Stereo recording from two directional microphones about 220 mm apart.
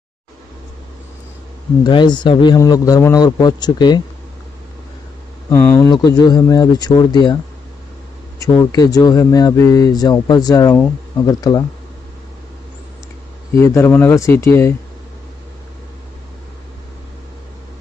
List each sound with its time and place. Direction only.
1.9 s a man's voice: 20° left (ahead or behind)
5.5 s speech: 15° left (ahead or behind)
8.4 s speech: 15° left (ahead or behind)
13.6 s speech: 10° left (ahead or behind)